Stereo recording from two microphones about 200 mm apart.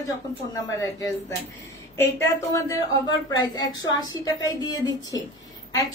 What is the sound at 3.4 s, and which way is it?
A woman's voice, 20° left (ahead or behind).